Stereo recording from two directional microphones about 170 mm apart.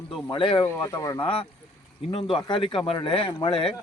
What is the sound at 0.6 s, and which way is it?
Speech, 20° left (ahead or behind).